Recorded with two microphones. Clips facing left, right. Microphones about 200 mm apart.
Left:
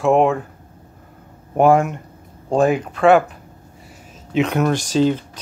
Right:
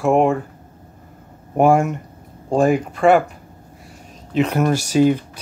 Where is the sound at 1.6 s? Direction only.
5° right (ahead or behind).